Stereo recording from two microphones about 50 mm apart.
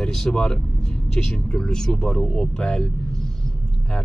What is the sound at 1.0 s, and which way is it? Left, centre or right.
Speech, centre.